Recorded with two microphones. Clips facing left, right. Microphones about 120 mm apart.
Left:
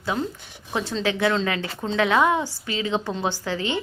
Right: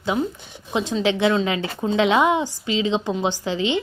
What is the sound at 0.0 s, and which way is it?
A woman's voice, 15° right (ahead or behind).